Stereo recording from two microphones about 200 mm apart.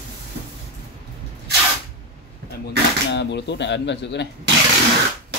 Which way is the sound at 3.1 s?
60° left (ahead or behind).